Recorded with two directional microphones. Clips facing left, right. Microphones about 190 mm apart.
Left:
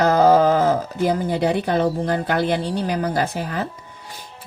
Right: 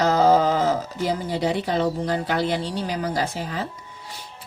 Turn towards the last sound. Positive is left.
turn(degrees=55)  # may be behind; listen again after turning